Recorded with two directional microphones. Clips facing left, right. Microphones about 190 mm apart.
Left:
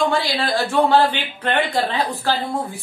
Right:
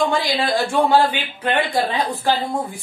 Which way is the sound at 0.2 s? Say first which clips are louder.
Right 1 dB; 15° right (ahead or behind).